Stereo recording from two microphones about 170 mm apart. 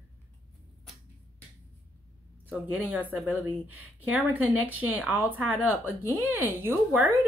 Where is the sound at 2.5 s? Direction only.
10° right (ahead or behind).